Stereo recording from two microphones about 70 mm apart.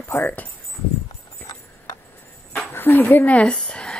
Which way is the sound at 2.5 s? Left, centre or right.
Left.